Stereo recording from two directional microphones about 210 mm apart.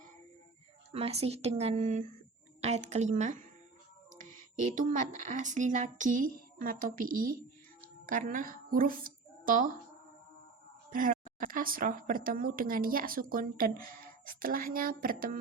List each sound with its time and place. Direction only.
0.9 s speech: 30° right (ahead or behind)
4.7 s a woman's voice: 35° right (ahead or behind)
10.9 s speech: 40° right (ahead or behind)